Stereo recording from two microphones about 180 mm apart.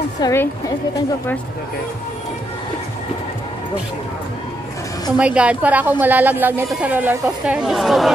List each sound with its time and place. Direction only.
0.2 s a woman's voice: 15° left (ahead or behind)
5.1 s a woman's voice: 5° right (ahead or behind)